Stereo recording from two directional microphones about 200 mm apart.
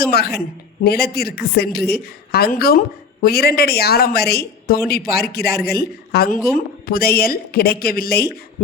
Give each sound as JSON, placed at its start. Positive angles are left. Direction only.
{"t": 0.0, "sound": "a woman's voice", "side_deg": 50}